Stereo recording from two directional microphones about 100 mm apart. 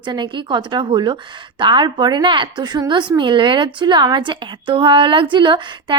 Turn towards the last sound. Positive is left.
turn(degrees=-50)  # may be behind; listen again after turning